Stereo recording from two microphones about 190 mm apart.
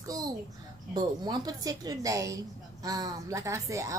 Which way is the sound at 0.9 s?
20° right (ahead or behind).